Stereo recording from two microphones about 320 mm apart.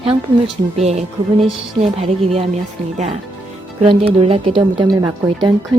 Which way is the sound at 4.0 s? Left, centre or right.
Centre.